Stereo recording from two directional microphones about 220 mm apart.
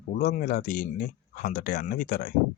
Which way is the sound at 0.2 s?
40° left (ahead or behind).